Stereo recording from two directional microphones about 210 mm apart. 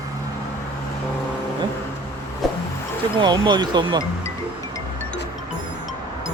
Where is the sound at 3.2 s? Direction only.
20° right (ahead or behind).